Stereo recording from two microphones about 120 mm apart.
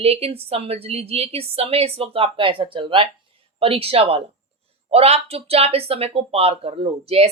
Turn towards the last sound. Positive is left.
turn(degrees=-60)  # may be behind; listen again after turning